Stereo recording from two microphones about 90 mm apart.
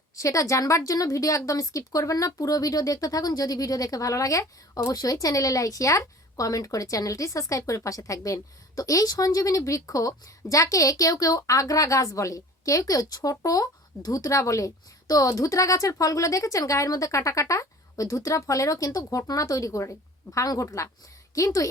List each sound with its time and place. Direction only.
0.2 s speech: 35° left (ahead or behind)